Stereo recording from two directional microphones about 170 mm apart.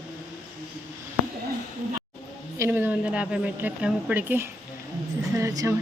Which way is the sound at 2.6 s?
10° right (ahead or behind).